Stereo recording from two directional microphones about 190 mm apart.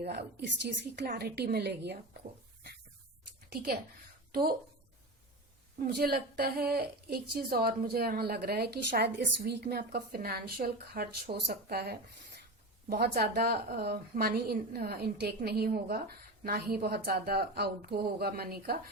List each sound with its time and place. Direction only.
0.0 s a woman's voice: 60° right (ahead or behind)
5.9 s a woman's voice: 55° right (ahead or behind)